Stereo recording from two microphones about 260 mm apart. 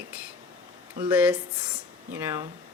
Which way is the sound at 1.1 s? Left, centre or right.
Centre.